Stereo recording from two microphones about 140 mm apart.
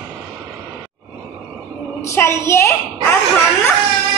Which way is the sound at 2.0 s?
20° left (ahead or behind).